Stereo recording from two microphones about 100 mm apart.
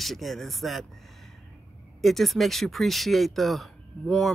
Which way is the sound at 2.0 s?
Centre (ahead or behind).